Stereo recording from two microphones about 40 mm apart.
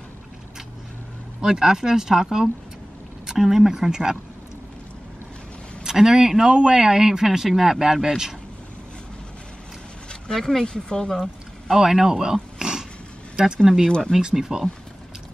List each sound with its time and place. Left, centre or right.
1.4 s speech: centre
5.9 s speech: centre
10.3 s speech: centre
10.6 s speech: centre
11.7 s speech: centre
13.8 s speech: centre
14.3 s speech: centre